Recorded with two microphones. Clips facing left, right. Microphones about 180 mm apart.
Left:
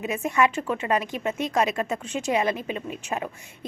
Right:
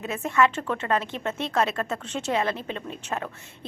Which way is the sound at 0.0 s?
15° left (ahead or behind).